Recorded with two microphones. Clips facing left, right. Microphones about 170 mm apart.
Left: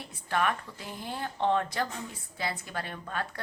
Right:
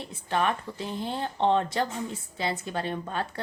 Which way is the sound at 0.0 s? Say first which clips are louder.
Right 2 dB; 25° right (ahead or behind).